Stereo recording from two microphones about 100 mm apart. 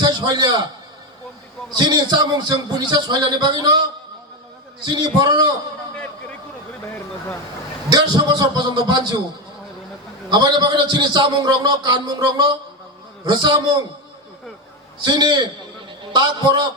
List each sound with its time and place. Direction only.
0.0 s a man's voice: 45° right (ahead or behind)
1.8 s a man's voice: 45° right (ahead or behind)
4.9 s a man's voice: 50° right (ahead or behind)
7.9 s a man's voice: 50° right (ahead or behind)
10.2 s a man's voice: 45° right (ahead or behind)
15.0 s a man's voice: 45° right (ahead or behind)